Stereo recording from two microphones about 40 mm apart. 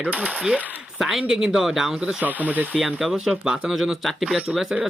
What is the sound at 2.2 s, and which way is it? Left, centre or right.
Speech, right.